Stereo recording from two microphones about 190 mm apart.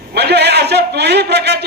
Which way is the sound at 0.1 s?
60° right (ahead or behind).